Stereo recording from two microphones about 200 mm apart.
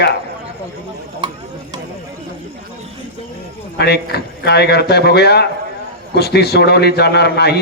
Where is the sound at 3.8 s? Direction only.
55° left (ahead or behind).